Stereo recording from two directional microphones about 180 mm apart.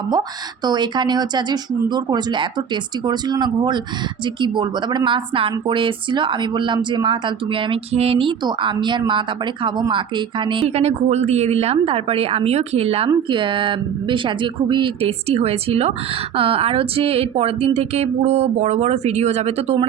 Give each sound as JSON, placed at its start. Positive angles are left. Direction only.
{"t": 0.1, "sound": "a woman's voice", "side_deg": -25}
{"t": 10.5, "sound": "a woman's voice", "side_deg": -35}